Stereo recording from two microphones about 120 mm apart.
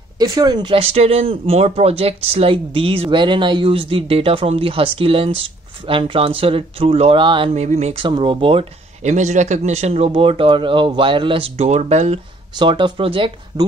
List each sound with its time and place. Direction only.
0.2 s speech: 30° right (ahead or behind)
7.5 s speech: 65° right (ahead or behind)
8.0 s speech: 45° right (ahead or behind)
9.0 s a man's voice: 80° right
12.5 s speech: 40° right (ahead or behind)